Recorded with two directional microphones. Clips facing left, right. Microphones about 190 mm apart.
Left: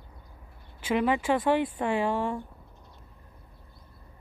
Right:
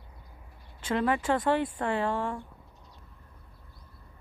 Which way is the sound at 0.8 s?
15° left (ahead or behind).